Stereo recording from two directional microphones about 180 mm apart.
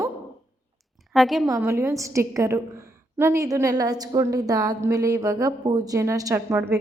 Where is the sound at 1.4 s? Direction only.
15° right (ahead or behind).